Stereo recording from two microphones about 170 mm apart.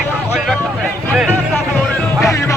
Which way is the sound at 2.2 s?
15° left (ahead or behind).